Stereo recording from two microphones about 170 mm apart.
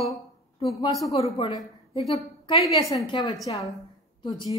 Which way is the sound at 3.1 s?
25° left (ahead or behind).